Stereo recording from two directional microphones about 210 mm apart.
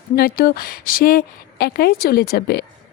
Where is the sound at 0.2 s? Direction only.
45° left (ahead or behind).